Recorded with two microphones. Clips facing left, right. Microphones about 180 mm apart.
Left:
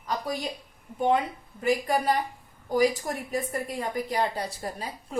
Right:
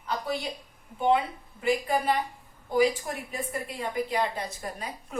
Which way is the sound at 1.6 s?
40° left (ahead or behind).